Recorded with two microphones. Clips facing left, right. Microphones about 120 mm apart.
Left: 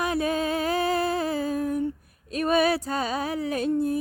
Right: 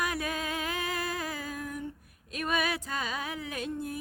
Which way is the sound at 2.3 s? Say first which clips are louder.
Left 9 dB; 35° left (ahead or behind).